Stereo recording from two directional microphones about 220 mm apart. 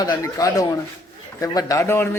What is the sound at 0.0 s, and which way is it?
Speech, 15° left (ahead or behind).